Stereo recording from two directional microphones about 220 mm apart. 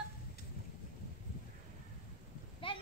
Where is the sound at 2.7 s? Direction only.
25° left (ahead or behind).